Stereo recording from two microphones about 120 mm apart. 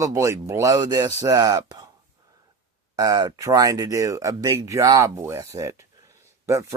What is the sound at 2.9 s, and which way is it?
Speech, 35° right (ahead or behind).